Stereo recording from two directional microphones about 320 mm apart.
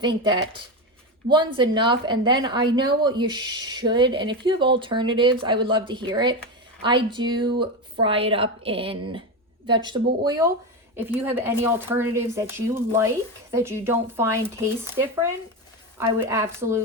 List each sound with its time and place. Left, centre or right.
0.0 s speech: centre